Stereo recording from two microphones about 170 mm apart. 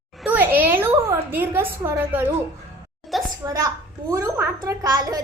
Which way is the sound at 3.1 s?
Centre (ahead or behind).